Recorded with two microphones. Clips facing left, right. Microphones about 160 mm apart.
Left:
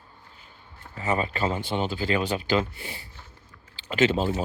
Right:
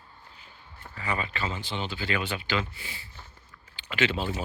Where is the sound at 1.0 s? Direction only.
40° left (ahead or behind).